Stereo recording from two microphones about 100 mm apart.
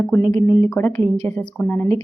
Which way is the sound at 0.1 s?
25° left (ahead or behind).